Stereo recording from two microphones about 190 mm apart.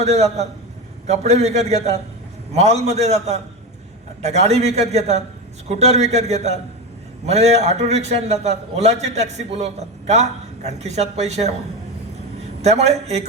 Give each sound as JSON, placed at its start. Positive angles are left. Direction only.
{"t": 0.0, "sound": "a man's voice", "side_deg": -35}
{"t": 12.6, "sound": "a man's voice", "side_deg": -35}